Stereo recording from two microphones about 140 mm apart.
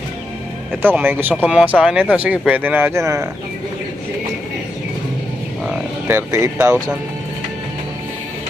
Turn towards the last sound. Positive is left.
turn(degrees=-20)  # may be behind; listen again after turning